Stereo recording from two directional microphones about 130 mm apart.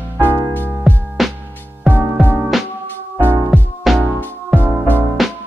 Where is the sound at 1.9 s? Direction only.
15° right (ahead or behind).